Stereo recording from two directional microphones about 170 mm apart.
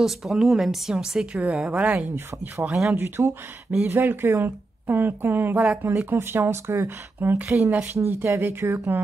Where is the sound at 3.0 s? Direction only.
15° right (ahead or behind).